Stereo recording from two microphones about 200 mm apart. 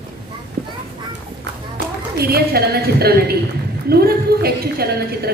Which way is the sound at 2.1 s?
50° right (ahead or behind).